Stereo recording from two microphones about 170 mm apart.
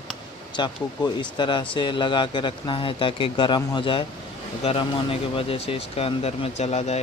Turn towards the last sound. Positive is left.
turn(degrees=40)  # may be behind; listen again after turning